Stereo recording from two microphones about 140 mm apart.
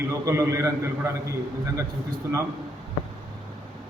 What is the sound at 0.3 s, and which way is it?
Speech, 20° right (ahead or behind).